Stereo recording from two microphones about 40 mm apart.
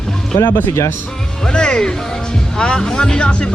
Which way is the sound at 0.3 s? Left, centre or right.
Left.